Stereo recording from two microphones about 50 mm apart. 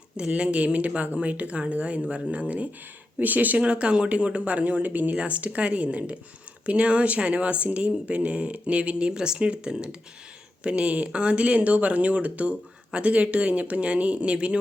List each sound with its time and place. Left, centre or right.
0.3 s speech: right